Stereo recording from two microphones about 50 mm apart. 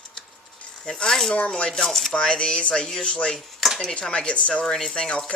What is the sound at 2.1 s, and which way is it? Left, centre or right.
Speech, centre.